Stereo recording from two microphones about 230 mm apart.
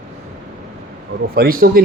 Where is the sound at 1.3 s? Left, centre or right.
Right.